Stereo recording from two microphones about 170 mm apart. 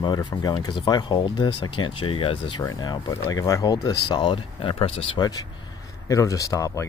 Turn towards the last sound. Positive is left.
turn(degrees=20)  # may be behind; listen again after turning